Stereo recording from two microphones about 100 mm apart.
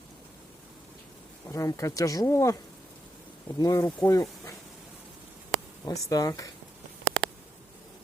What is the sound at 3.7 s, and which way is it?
Speech, 30° left (ahead or behind).